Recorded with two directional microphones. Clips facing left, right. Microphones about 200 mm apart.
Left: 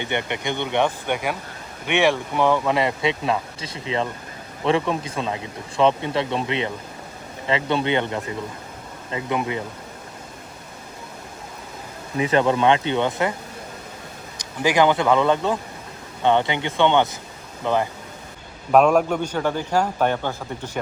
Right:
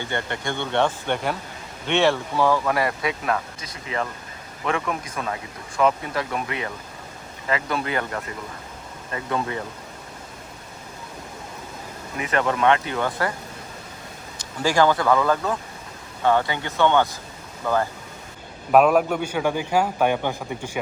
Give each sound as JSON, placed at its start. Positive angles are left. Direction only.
{"t": 0.0, "sound": "speech", "side_deg": 20}
{"t": 12.1, "sound": "speech", "side_deg": 30}
{"t": 14.6, "sound": "speech", "side_deg": 20}
{"t": 18.7, "sound": "a man's voice", "side_deg": -5}